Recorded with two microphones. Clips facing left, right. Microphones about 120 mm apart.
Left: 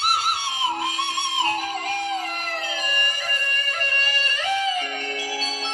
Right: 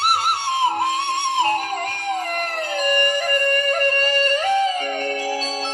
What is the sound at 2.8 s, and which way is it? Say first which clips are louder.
Music: right 9 dB; 55° right (ahead or behind).